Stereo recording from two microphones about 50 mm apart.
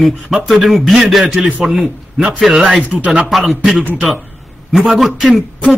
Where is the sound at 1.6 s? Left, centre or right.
Centre.